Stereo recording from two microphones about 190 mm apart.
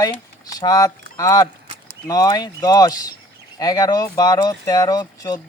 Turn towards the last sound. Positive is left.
turn(degrees=20)  # may be behind; listen again after turning